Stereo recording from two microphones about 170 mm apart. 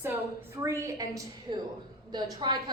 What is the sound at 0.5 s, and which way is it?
A woman's voice, 15° right (ahead or behind).